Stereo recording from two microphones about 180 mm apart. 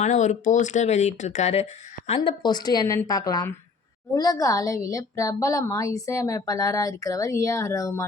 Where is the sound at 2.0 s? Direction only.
25° left (ahead or behind).